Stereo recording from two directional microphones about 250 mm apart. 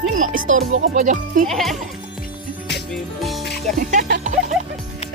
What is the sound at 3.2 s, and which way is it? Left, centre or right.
Music, centre.